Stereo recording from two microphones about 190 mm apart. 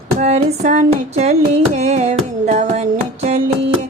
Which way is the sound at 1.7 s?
35° right (ahead or behind).